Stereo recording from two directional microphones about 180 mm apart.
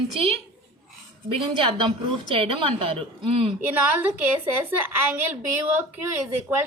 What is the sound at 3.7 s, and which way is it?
A woman's voice, 10° right (ahead or behind).